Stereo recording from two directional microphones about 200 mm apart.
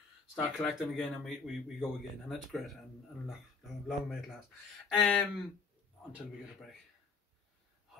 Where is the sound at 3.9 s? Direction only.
Centre (ahead or behind).